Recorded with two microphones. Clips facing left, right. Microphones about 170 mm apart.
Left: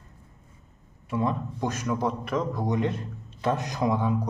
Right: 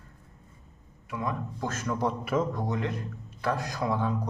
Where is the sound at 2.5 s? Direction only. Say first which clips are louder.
Left 4 dB; 15° left (ahead or behind).